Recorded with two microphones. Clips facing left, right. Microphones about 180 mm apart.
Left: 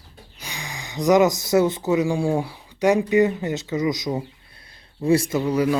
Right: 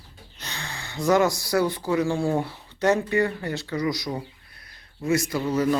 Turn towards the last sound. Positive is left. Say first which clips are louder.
# left 2 dB
turn(degrees=10)  # may be behind; listen again after turning